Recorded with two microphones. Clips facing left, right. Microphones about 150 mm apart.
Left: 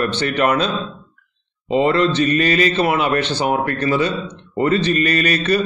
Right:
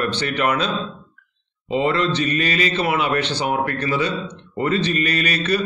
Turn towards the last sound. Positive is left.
turn(degrees=45)  # may be behind; listen again after turning